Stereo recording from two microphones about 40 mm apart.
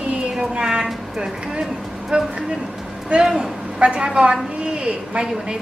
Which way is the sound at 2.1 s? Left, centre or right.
Right.